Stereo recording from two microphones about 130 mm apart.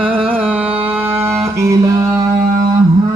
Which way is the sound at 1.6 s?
25° right (ahead or behind).